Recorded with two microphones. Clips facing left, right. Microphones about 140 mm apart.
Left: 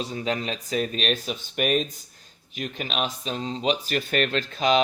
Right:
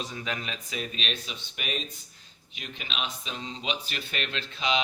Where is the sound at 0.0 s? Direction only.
35° left (ahead or behind).